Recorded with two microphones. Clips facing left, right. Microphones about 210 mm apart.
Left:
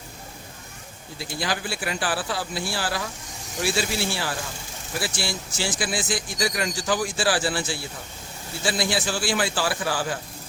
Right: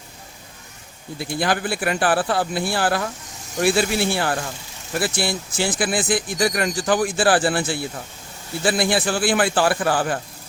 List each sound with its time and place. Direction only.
1.2 s speech: 55° right (ahead or behind)